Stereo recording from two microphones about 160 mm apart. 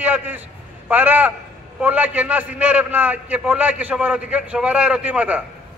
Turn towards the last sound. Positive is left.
turn(degrees=-10)  # may be behind; listen again after turning